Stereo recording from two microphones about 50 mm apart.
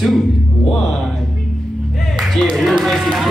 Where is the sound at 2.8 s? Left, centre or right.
Centre.